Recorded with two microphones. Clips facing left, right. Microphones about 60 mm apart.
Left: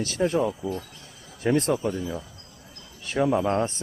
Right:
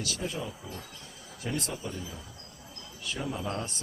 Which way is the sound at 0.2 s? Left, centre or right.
Left.